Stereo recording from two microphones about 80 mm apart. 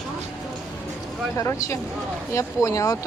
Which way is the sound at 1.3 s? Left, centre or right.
Left.